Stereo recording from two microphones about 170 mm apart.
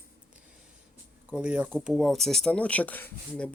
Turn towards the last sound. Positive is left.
turn(degrees=10)  # may be behind; listen again after turning